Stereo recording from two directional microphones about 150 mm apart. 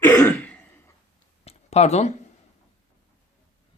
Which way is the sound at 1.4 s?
45° left (ahead or behind).